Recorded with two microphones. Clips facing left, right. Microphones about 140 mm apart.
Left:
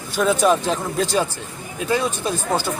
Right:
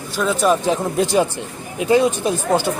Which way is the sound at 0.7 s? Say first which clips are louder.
Right 4 dB; 15° right (ahead or behind).